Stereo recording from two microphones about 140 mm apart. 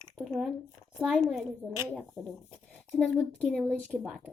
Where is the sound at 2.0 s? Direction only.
5° left (ahead or behind).